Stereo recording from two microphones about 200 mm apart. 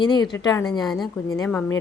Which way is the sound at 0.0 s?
20° left (ahead or behind).